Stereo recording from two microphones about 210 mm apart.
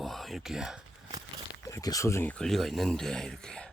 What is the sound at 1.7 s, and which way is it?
Speech, 15° left (ahead or behind).